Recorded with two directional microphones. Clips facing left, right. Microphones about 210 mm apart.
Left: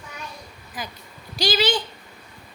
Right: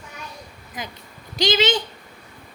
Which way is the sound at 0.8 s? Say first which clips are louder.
Right 1 dB; 20° right (ahead or behind).